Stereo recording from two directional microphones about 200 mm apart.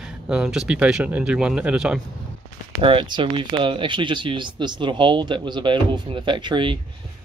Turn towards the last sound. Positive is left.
turn(degrees=-25)  # may be behind; listen again after turning